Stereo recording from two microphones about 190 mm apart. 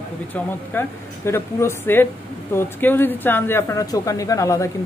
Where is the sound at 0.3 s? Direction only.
10° left (ahead or behind).